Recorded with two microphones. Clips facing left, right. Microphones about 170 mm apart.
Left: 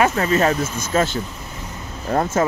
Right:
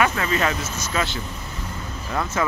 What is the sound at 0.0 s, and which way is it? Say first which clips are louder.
Speech: left 4 dB; 35° left (ahead or behind).